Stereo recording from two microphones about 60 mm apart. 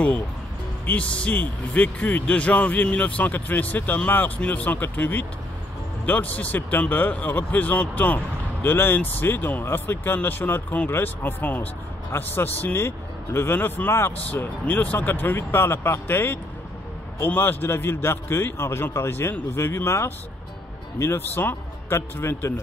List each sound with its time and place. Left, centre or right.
0.8 s speech: left
14.1 s speech: left
21.4 s speech: left
21.9 s speech: left